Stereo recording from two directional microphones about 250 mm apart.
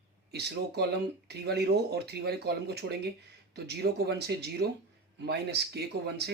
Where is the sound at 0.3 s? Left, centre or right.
Right.